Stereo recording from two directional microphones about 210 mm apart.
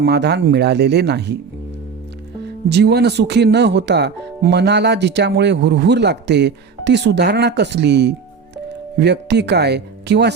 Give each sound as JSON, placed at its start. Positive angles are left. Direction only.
{"t": 0.0, "sound": "speech", "side_deg": -50}
{"t": 2.6, "sound": "speech", "side_deg": -55}